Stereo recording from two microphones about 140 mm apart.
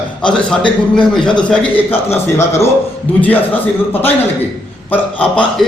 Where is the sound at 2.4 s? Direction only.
20° left (ahead or behind).